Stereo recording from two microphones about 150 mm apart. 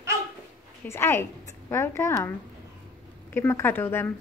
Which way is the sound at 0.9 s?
15° left (ahead or behind).